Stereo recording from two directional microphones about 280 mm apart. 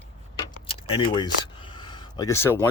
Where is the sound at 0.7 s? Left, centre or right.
Centre.